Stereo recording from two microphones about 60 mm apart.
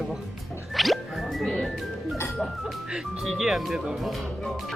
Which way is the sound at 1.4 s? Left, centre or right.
Centre.